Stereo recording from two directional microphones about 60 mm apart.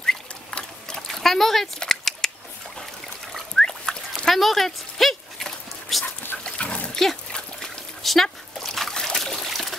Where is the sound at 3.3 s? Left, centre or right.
Centre.